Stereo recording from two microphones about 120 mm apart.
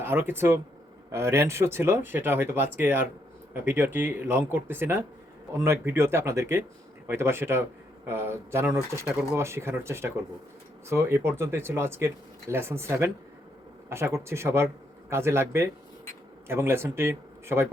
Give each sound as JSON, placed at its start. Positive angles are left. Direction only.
{"t": 0.0, "sound": "speech", "side_deg": -20}